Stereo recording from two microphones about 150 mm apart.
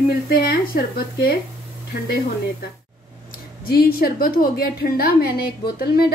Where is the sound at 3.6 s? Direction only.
90° left.